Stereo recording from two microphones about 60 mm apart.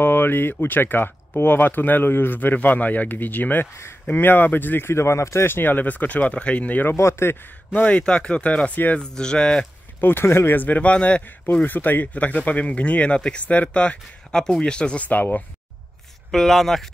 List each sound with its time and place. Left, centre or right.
0.0 s speech: left
4.9 s speech: left
7.0 s speech: left
7.7 s speech: left
9.0 s speech: centre
9.9 s speech: left; by 11.2 s centre
11.6 s speech: left; by 15.0 s centre
15.0 s speech: left
16.3 s speech: centre